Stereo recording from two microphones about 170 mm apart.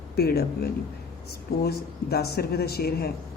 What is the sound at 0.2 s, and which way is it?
A woman's voice, 65° left (ahead or behind).